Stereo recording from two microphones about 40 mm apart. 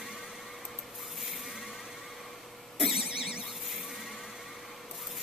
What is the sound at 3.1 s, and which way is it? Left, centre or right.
Squeal, centre.